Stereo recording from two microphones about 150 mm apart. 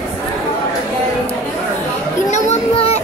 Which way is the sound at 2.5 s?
45° left (ahead or behind).